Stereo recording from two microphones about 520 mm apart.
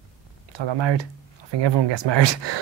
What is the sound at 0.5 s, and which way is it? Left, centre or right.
Speech, right.